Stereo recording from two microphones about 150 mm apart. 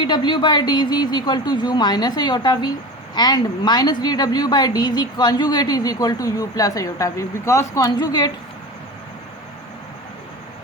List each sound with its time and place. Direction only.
0.0 s a woman's voice: 30° left (ahead or behind)